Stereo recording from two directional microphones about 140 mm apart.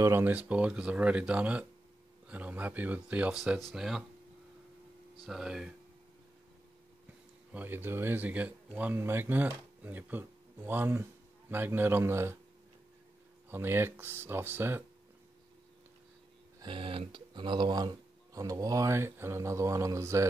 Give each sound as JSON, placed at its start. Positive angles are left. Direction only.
{"t": 0.0, "sound": "speech", "side_deg": -15}
{"t": 5.2, "sound": "speech", "side_deg": -5}
{"t": 7.5, "sound": "speech", "side_deg": -15}
{"t": 13.5, "sound": "speech", "side_deg": -15}
{"t": 16.5, "sound": "speech", "side_deg": -35}